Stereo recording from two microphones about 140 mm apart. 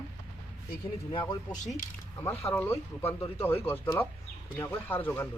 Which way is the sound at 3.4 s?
15° left (ahead or behind).